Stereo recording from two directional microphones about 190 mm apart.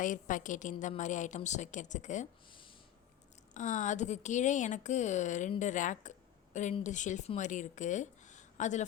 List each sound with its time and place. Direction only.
0.0 s speech: 40° left (ahead or behind)
2.5 s a sound: 25° left (ahead or behind)
3.5 s speech: 40° left (ahead or behind)